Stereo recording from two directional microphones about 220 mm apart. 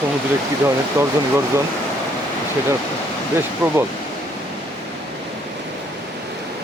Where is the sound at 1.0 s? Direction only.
10° right (ahead or behind).